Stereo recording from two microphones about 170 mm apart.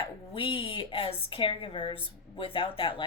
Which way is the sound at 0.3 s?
30° left (ahead or behind).